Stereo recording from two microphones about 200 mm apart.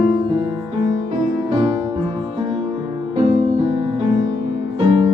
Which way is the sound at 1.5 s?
30° right (ahead or behind).